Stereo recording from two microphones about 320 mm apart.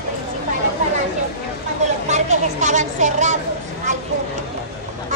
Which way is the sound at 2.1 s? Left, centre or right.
Right.